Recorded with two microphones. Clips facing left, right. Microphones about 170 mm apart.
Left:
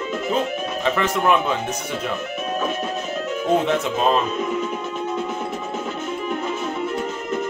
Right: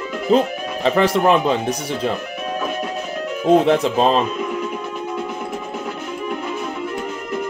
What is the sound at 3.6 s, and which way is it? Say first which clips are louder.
Speech: right 5 dB; 35° right (ahead or behind).